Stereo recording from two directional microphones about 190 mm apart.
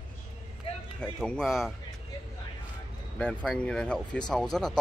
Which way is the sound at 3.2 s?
5° left (ahead or behind).